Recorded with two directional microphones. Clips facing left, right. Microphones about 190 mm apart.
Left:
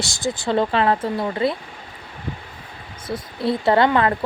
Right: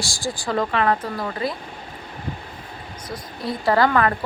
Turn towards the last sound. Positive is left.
turn(degrees=25)  # may be behind; listen again after turning